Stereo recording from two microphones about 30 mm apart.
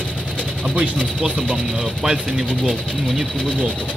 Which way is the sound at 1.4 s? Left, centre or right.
Right.